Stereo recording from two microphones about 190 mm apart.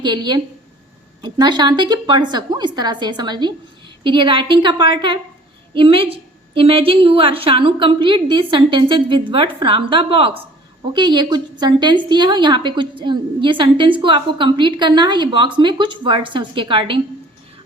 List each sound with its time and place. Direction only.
0.0 s a woman's voice: 25° right (ahead or behind)